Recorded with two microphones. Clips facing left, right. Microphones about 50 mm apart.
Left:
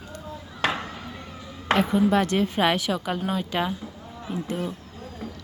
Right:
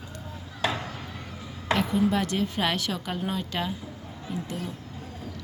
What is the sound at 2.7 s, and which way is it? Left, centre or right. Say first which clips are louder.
Speech: left 4 dB; centre.